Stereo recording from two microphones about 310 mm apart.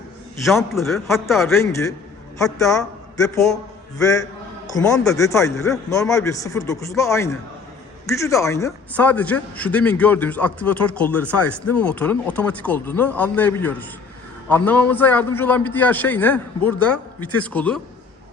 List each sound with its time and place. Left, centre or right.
0.4 s a man's voice: centre
11.3 s speech: left
11.7 s a man's voice: centre